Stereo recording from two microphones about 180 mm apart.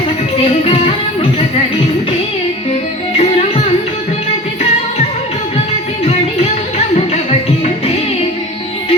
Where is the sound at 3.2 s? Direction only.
35° left (ahead or behind).